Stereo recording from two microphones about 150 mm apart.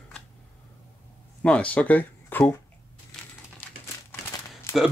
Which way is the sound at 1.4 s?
10° left (ahead or behind).